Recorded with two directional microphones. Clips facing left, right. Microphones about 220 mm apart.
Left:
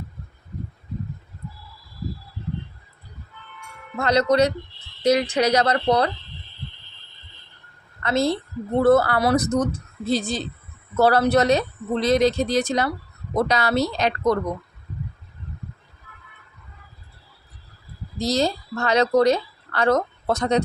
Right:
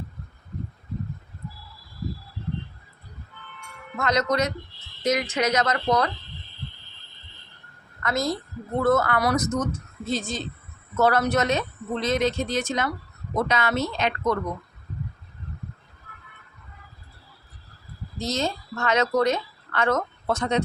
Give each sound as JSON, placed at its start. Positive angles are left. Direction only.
{"t": 3.9, "sound": "speech", "side_deg": 30}
{"t": 8.0, "sound": "a woman's voice", "side_deg": 30}
{"t": 18.2, "sound": "speech", "side_deg": 35}